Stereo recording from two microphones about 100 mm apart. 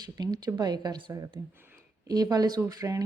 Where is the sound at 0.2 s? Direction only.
45° right (ahead or behind).